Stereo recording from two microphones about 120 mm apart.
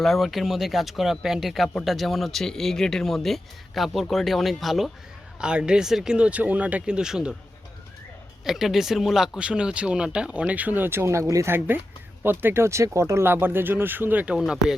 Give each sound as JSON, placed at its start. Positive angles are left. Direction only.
{"t": 0.0, "sound": "speech", "side_deg": 0}
{"t": 8.4, "sound": "speech", "side_deg": -5}